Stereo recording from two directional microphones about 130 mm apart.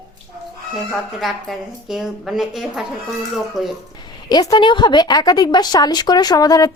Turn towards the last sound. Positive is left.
turn(degrees=30)  # may be behind; listen again after turning